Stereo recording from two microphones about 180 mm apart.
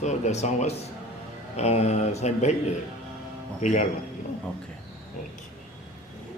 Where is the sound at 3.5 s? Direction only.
40° left (ahead or behind).